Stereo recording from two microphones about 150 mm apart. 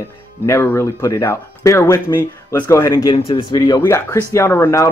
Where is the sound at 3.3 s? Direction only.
30° left (ahead or behind).